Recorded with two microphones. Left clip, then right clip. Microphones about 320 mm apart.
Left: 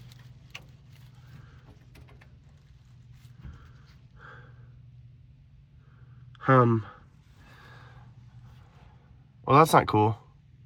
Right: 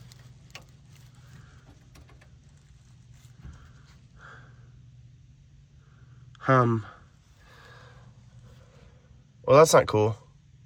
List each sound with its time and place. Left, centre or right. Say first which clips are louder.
6.4 s speech: left 1 dB; centre
9.4 s speech: right 2 dB; centre